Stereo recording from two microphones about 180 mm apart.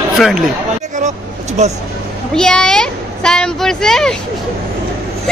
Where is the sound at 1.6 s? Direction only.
40° right (ahead or behind).